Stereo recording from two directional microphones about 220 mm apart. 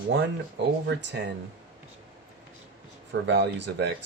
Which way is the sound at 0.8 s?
50° right (ahead or behind).